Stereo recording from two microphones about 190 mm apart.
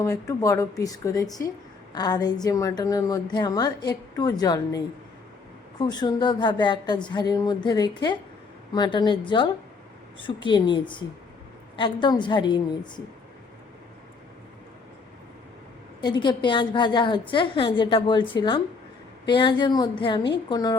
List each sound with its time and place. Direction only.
0.0 s speech: 15° left (ahead or behind)
5.8 s speech: 20° left (ahead or behind)
16.0 s speech: 25° left (ahead or behind)